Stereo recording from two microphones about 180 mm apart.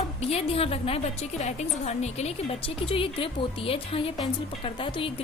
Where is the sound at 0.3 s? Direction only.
35° left (ahead or behind).